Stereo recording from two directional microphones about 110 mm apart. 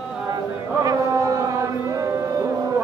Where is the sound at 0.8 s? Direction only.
35° right (ahead or behind).